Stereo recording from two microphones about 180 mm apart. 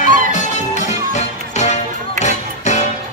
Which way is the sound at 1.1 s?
40° left (ahead or behind).